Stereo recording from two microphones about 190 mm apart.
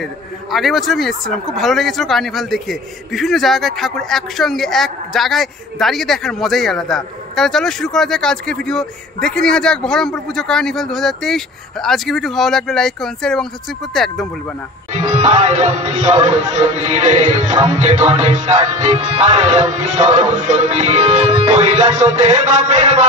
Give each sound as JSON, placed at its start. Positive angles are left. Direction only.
{"t": 0.0, "sound": "speech", "side_deg": 0}
{"t": 15.0, "sound": "a man's voice", "side_deg": -40}